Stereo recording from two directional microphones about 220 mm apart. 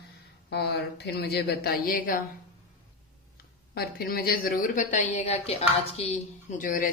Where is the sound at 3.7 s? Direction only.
45° left (ahead or behind).